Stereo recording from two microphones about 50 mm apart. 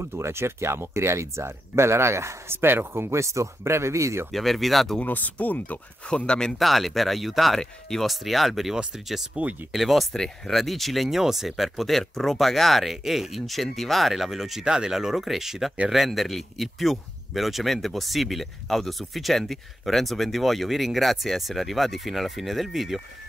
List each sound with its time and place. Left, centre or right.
0.0 s speech: right
2.6 s speech: right
4.3 s speech: centre
5.0 s speech: left
6.0 s speech: centre
6.6 s speech: centre
9.3 s speech: centre
9.7 s speech: centre
10.1 s speech: centre